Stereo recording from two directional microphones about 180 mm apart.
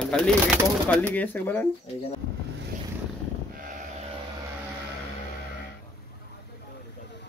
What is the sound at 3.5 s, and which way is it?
Sheep, 50° right (ahead or behind).